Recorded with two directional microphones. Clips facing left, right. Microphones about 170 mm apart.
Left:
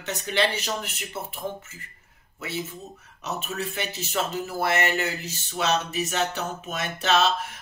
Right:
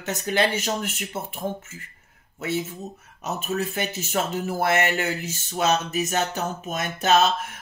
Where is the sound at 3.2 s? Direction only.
45° right (ahead or behind).